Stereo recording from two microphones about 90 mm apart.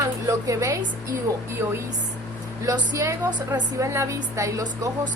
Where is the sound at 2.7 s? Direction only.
40° right (ahead or behind).